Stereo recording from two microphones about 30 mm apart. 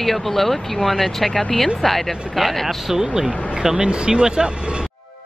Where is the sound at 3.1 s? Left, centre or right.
Right.